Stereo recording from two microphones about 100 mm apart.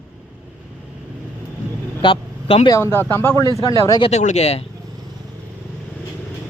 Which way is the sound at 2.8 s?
25° left (ahead or behind).